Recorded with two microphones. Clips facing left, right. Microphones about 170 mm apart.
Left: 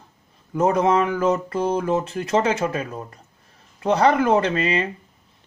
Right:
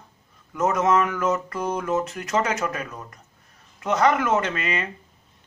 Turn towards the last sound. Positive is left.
turn(degrees=30)  # may be behind; listen again after turning